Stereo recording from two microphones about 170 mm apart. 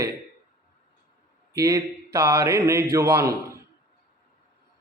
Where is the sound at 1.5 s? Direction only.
20° right (ahead or behind).